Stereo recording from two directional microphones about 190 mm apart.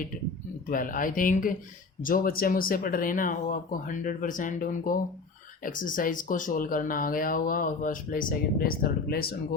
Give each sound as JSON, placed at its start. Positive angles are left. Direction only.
{"t": 0.7, "sound": "speech", "side_deg": 45}